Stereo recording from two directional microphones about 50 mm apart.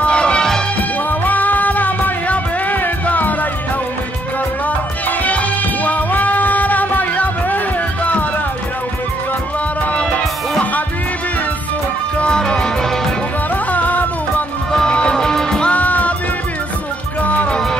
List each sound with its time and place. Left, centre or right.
0.0 s music: left
0.7 s music: left
4.6 s music: left
12.2 s music: centre
13.7 s music: left
14.7 s music: centre
15.7 s music: left
17.2 s music: left